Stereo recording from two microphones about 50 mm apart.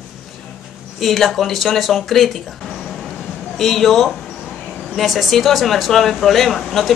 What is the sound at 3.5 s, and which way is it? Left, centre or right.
Speech, centre.